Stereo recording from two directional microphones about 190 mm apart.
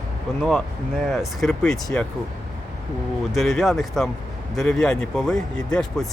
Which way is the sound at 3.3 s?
Centre (ahead or behind).